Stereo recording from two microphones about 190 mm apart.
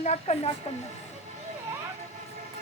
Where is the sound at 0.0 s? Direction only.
35° left (ahead or behind).